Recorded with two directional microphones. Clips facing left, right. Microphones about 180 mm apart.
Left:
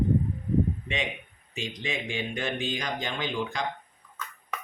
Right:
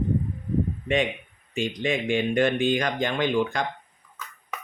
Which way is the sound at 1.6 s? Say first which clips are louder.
Right 8 dB; 55° right (ahead or behind).